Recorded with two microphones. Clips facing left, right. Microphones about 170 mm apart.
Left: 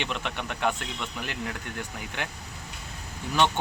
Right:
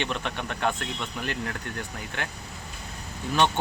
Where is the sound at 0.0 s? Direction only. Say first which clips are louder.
Right 2 dB; 15° left (ahead or behind).